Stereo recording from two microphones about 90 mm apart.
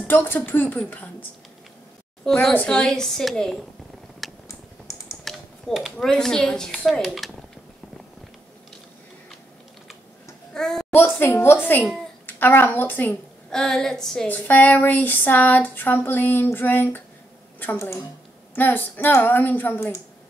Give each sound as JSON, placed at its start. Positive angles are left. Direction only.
{"t": 0.0, "sound": "speech", "side_deg": 20}
{"t": 2.3, "sound": "a woman's voice", "side_deg": 5}
{"t": 4.2, "sound": "a sound", "side_deg": 0}
{"t": 5.2, "sound": "a woman's voice", "side_deg": 0}
{"t": 10.5, "sound": "babbling", "side_deg": 5}
{"t": 10.9, "sound": "speech", "side_deg": 25}
{"t": 13.5, "sound": "a woman's voice", "side_deg": 10}
{"t": 14.2, "sound": "speech", "side_deg": 20}
{"t": 18.5, "sound": "speech", "side_deg": 20}